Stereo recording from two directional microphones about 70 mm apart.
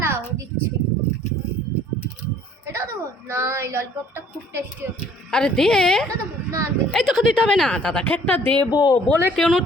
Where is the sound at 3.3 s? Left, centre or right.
Right.